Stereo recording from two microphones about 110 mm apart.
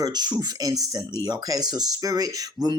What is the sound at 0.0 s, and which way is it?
Speech, 40° right (ahead or behind).